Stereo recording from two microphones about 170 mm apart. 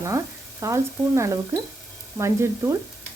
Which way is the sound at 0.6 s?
15° right (ahead or behind).